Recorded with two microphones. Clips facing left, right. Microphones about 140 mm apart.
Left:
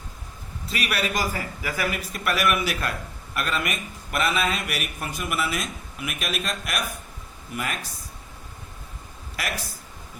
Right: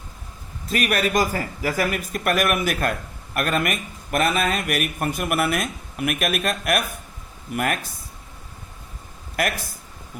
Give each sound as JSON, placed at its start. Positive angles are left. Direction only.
{"t": 0.7, "sound": "speech", "side_deg": -45}
{"t": 9.3, "sound": "speech", "side_deg": -55}